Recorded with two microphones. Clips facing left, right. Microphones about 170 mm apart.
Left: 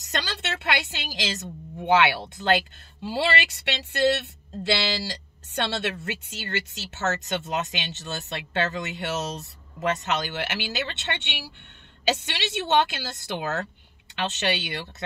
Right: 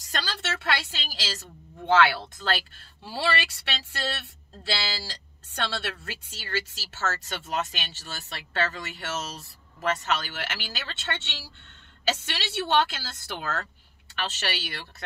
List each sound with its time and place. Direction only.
0.1 s a woman's voice: 20° left (ahead or behind)
4.6 s a woman's voice: 15° left (ahead or behind)